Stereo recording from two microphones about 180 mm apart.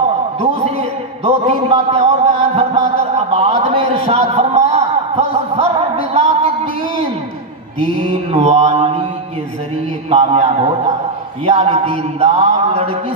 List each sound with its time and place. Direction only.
1.2 s a man's voice: 35° right (ahead or behind)
2.5 s a sound: 30° right (ahead or behind)
8.3 s a man's voice: 35° right (ahead or behind)
10.0 s a man's voice: 35° right (ahead or behind)